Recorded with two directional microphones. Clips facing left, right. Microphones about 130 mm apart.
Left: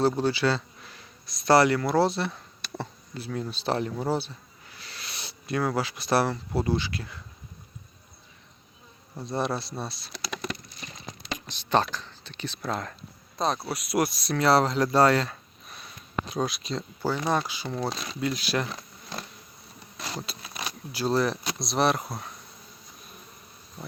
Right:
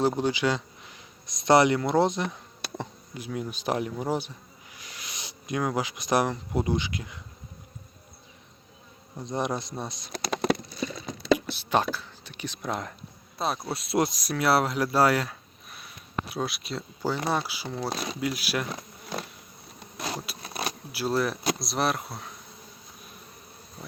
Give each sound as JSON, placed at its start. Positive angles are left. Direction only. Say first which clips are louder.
{"t": 0.2, "sound": "speech", "louder": "left 1 dB", "side_deg": -15}
{"t": 9.2, "sound": "speech", "louder": "even", "side_deg": -20}
{"t": 10.1, "sound": "speech", "louder": "right 6 dB", "side_deg": -50}
{"t": 11.3, "sound": "speech", "louder": "left 1 dB", "side_deg": -10}
{"t": 13.4, "sound": "speech", "louder": "left 2 dB", "side_deg": -5}
{"t": 13.7, "sound": "speech", "louder": "even", "side_deg": -25}
{"t": 20.0, "sound": "a sound", "louder": "right 2 dB", "side_deg": -10}
{"t": 20.4, "sound": "keys jangling", "louder": "right 4 dB", "side_deg": -40}
{"t": 20.9, "sound": "speech", "louder": "left 2 dB", "side_deg": -5}